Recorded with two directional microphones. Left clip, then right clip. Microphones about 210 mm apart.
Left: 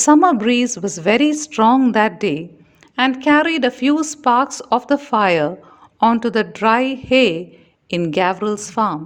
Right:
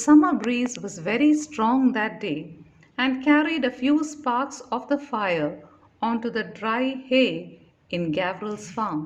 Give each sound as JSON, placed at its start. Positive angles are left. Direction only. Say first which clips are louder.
{"t": 0.0, "sound": "a woman's voice", "louder": "left 6 dB", "side_deg": 40}